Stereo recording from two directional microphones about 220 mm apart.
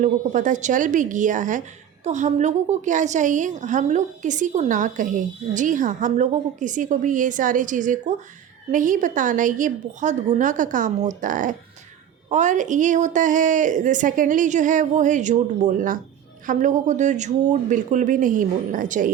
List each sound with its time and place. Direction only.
0.0 s a woman's voice: 35° right (ahead or behind)